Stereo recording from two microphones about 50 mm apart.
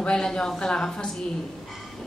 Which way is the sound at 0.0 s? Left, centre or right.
Centre.